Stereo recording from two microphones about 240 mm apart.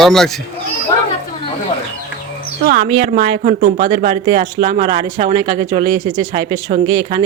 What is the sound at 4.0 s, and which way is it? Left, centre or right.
Speech, right.